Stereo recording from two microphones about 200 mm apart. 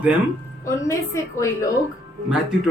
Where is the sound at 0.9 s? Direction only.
15° left (ahead or behind).